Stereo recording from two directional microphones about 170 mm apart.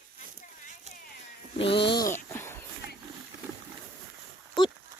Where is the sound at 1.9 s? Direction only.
20° left (ahead or behind).